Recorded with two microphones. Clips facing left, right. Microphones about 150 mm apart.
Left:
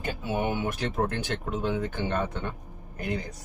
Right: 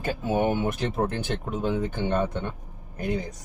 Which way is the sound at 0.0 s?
45° right (ahead or behind).